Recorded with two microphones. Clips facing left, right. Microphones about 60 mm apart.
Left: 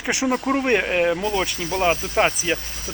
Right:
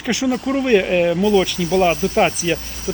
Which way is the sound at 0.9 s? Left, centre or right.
Centre.